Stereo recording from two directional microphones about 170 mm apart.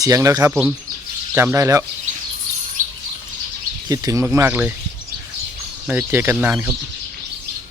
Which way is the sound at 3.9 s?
20° right (ahead or behind).